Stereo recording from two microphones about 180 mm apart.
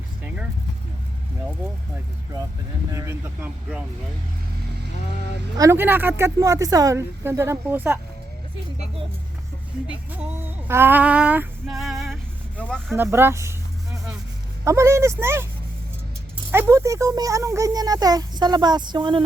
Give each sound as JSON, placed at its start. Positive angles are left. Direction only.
{"t": 2.9, "sound": "speech", "side_deg": -15}
{"t": 5.5, "sound": "speech", "side_deg": -15}
{"t": 9.8, "sound": "speech", "side_deg": -10}
{"t": 12.9, "sound": "a sound", "side_deg": -15}
{"t": 14.6, "sound": "speech", "side_deg": -15}
{"t": 16.5, "sound": "speech", "side_deg": -15}